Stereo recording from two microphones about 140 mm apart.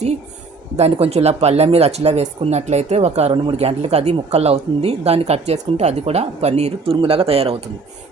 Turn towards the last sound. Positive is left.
turn(degrees=-45)  # may be behind; listen again after turning